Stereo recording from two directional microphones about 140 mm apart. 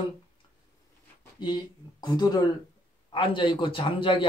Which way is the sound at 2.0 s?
30° left (ahead or behind).